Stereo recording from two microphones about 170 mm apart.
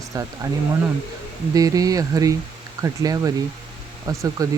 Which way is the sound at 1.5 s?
20° right (ahead or behind).